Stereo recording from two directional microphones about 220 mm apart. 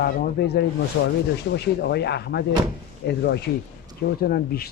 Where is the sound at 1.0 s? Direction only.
55° left (ahead or behind).